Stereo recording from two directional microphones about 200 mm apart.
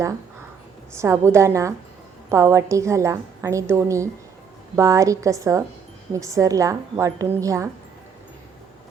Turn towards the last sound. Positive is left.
turn(degrees=-15)  # may be behind; listen again after turning